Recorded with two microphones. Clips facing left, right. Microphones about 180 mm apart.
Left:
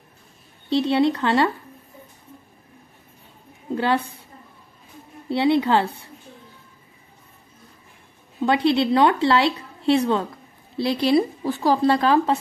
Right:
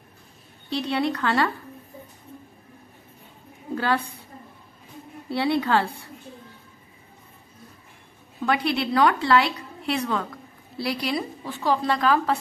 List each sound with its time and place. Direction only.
0.7 s a woman's voice: 25° left (ahead or behind)
3.7 s a woman's voice: 25° left (ahead or behind)
5.3 s a woman's voice: 20° left (ahead or behind)
8.4 s a woman's voice: 25° left (ahead or behind)